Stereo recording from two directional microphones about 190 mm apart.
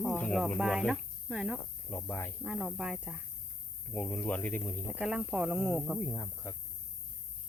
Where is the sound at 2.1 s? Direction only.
10° left (ahead or behind).